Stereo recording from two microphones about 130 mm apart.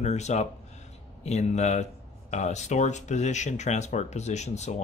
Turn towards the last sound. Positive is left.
turn(degrees=60)  # may be behind; listen again after turning